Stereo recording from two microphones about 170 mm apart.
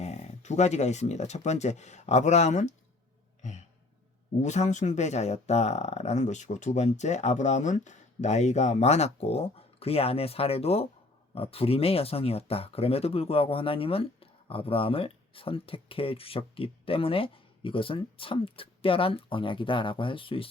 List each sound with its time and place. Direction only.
0.0 s speech: 40° left (ahead or behind)
4.4 s speech: 45° left (ahead or behind)